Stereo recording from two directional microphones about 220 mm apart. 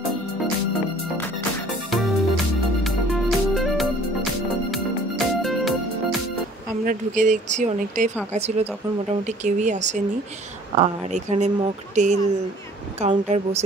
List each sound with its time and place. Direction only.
1.9 s music: centre (ahead or behind)
6.9 s speech: 35° right (ahead or behind)